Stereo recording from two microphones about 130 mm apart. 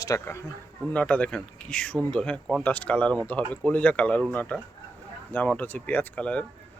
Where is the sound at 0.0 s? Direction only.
25° left (ahead or behind).